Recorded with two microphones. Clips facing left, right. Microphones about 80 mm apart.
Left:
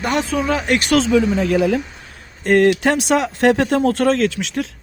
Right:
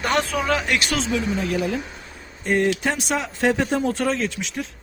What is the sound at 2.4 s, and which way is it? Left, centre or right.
Speech, left.